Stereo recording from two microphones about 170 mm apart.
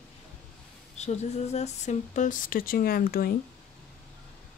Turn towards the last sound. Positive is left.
turn(degrees=60)  # may be behind; listen again after turning